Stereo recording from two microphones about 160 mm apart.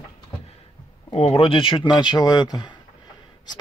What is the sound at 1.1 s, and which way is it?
Speech, 40° left (ahead or behind).